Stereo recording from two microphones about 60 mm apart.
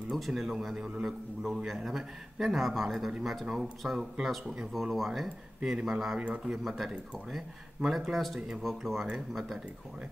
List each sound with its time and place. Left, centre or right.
0.1 s a man's voice: centre
6.1 s speech: centre
6.5 s a man's voice: centre